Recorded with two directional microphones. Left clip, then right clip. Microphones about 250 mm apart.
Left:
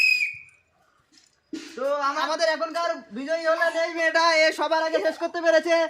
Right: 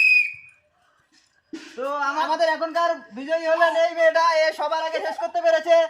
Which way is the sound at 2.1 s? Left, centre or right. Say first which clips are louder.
Right 3 dB; centre.